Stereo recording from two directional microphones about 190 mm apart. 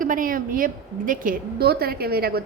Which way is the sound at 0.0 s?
45° right (ahead or behind).